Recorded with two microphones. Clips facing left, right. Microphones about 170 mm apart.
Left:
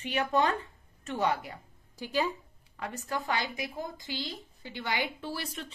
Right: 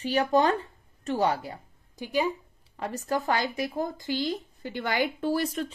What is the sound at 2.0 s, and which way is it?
Speech, 15° right (ahead or behind).